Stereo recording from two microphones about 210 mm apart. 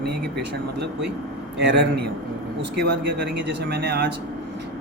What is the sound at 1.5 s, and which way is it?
Speech, 55° right (ahead or behind).